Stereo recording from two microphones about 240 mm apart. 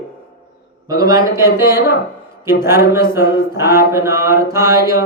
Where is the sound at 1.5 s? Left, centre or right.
Centre.